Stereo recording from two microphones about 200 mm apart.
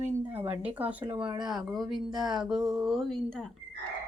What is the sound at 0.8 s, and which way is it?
A woman's voice, 5° right (ahead or behind).